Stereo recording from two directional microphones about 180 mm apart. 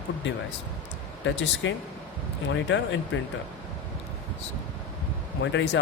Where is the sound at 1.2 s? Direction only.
90° left.